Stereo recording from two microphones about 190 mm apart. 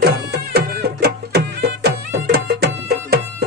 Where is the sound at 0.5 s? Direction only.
55° right (ahead or behind).